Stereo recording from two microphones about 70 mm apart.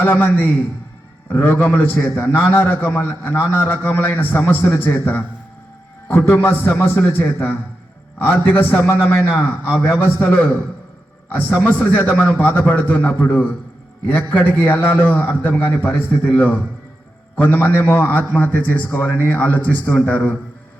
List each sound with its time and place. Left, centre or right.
0.0 s a man's voice: left
14.5 s a man's voice: left